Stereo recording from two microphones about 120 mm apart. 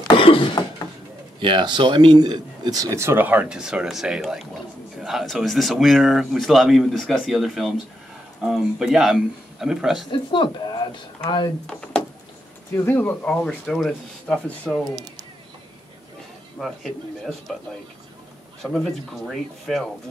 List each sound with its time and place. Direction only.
0.2 s a sound: 45° left (ahead or behind)
1.4 s speech: 40° right (ahead or behind); by 10.0 s 5° right (ahead or behind)
10.1 s speech: 40° left (ahead or behind)
12.7 s speech: 15° left (ahead or behind)
16.5 s speech: centre (ahead or behind)
18.6 s speech: centre (ahead or behind)